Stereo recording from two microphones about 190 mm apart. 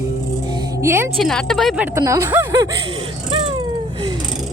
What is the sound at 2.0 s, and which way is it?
Speech, 15° right (ahead or behind).